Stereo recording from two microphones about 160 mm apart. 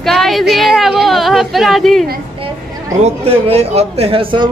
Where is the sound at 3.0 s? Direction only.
40° right (ahead or behind).